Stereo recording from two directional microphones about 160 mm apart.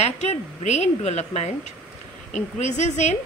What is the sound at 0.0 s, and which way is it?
Speech, 45° left (ahead or behind).